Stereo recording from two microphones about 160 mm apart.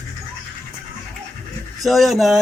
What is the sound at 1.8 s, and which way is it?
Speech, centre (ahead or behind).